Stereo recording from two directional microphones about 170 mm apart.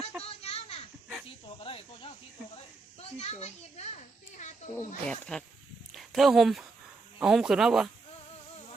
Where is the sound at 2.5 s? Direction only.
35° left (ahead or behind).